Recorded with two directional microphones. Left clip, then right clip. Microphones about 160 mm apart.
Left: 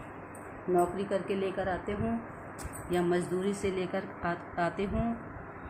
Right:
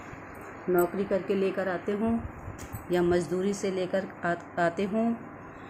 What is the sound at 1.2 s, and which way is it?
Speech, 60° right (ahead or behind).